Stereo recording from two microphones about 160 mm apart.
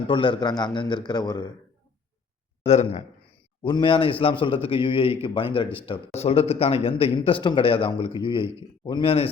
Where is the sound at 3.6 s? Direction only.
30° left (ahead or behind).